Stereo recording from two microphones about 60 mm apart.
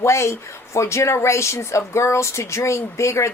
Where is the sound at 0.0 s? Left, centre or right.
Left.